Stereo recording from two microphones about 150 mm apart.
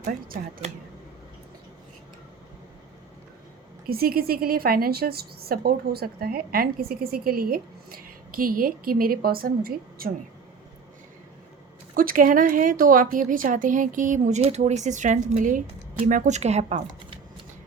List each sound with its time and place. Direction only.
3.8 s a woman's voice: 85° right
11.9 s speech: 65° right (ahead or behind); by 17.2 s 45° right (ahead or behind)